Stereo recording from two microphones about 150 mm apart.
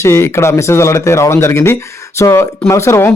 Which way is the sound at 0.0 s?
20° left (ahead or behind).